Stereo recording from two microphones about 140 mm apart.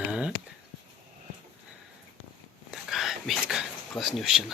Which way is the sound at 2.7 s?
Centre (ahead or behind).